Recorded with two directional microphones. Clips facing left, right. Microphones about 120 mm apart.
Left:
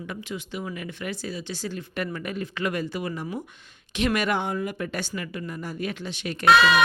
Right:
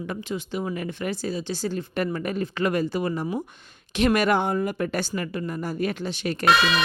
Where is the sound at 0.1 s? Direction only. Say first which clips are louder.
Right 4 dB; 30° right (ahead or behind).